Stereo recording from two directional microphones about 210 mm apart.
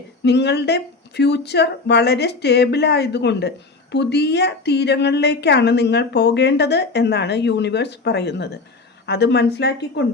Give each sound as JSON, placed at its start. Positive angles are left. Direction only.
{"t": 0.2, "sound": "a woman's voice", "side_deg": 55}